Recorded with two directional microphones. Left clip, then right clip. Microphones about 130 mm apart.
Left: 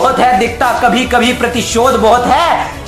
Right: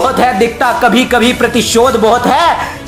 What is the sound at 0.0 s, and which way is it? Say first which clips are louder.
A woman's voice: left 1 dB; 30° right (ahead or behind).